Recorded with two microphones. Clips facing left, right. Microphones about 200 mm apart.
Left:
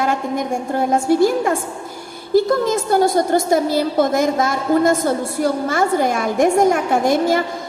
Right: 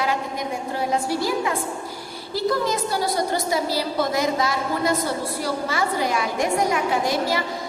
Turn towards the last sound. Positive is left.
turn(degrees=50)  # may be behind; listen again after turning